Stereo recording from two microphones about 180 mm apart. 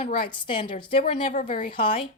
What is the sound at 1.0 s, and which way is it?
Speech, 50° left (ahead or behind).